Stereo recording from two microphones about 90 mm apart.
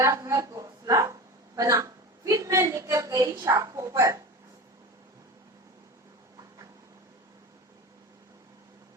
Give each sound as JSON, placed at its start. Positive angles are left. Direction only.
{"t": 0.0, "sound": "a woman's voice", "side_deg": -40}